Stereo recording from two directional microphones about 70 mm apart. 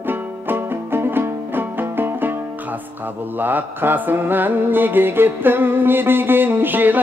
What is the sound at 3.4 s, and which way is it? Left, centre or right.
Mantra, right.